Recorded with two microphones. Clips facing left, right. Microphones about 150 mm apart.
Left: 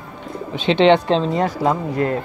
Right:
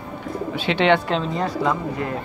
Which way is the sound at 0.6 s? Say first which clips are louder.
Left 5 dB; 20° left (ahead or behind).